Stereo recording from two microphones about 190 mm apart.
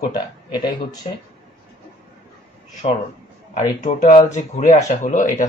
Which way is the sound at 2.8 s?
30° left (ahead or behind).